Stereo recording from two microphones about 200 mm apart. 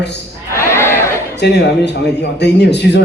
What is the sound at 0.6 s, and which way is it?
Crowd, 15° left (ahead or behind).